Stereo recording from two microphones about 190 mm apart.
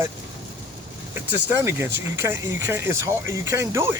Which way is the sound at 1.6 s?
15° right (ahead or behind).